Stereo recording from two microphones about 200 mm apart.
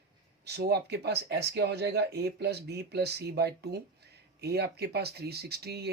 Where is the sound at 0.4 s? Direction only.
55° right (ahead or behind).